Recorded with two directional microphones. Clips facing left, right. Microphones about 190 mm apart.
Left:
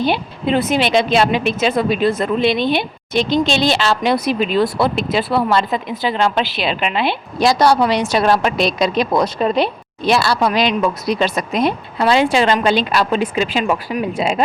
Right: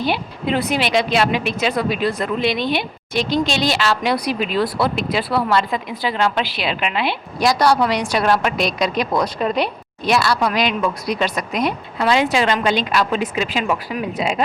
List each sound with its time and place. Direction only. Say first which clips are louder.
0.0 s a woman's voice: left 3 dB; 25° left (ahead or behind)